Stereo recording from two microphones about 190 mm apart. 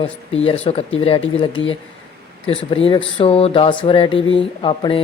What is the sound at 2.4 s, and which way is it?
Speech, 30° left (ahead or behind).